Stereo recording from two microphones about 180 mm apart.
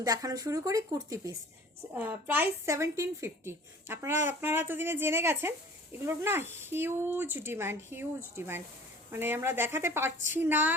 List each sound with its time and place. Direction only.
0.0 s speech: 20° right (ahead or behind)